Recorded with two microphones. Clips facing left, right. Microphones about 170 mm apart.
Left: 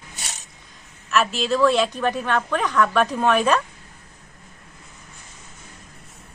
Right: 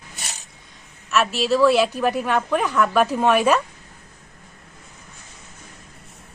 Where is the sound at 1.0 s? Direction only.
Centre (ahead or behind).